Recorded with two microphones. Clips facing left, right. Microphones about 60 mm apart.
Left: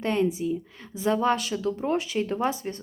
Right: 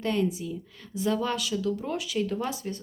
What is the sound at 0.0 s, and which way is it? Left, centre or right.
A woman's voice, left.